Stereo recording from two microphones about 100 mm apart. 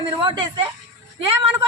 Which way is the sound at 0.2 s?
55° right (ahead or behind).